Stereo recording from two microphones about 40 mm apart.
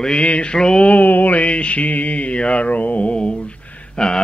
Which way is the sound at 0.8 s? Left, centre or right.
Left.